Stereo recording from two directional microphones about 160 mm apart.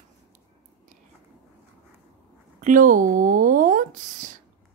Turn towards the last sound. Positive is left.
turn(degrees=-55)  # may be behind; listen again after turning